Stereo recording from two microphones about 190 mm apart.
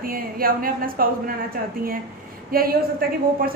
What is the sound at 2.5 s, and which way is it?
Speech, 50° right (ahead or behind).